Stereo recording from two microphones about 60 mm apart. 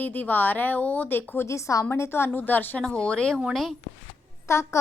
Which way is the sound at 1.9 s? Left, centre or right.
Left.